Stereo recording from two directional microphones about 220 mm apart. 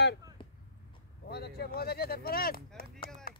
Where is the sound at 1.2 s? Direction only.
45° left (ahead or behind).